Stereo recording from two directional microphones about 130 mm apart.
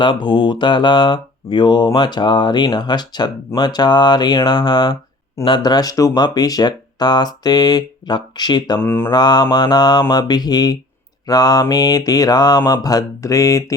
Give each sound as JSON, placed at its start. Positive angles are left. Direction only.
{"t": 0.0, "sound": "mantra", "side_deg": 40}
{"t": 8.8, "sound": "mantra", "side_deg": 15}
{"t": 9.0, "sound": "mantra", "side_deg": 30}